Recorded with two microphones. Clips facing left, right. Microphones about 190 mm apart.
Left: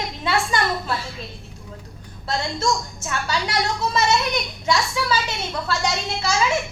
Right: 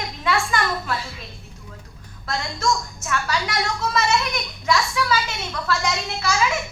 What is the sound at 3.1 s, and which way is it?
A woman's voice, 25° left (ahead or behind).